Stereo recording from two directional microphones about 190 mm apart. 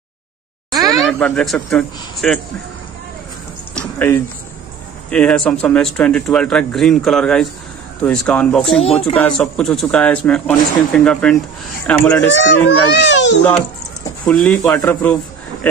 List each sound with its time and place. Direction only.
0.8 s speech: centre (ahead or behind)
3.7 s a sound: 5° left (ahead or behind)
5.1 s speech: 5° left (ahead or behind)
8.8 s speech: 30° left (ahead or behind)
9.1 s a man's voice: 5° left (ahead or behind)
12.4 s a child's voice: 70° left (ahead or behind)
14.2 s a man's voice: 5° left (ahead or behind)